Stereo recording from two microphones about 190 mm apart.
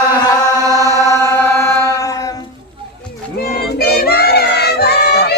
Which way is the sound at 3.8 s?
55° left (ahead or behind).